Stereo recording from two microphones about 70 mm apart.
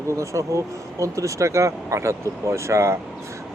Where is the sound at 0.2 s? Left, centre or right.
Right.